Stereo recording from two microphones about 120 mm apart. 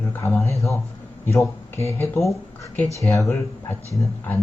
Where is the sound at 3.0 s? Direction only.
25° left (ahead or behind).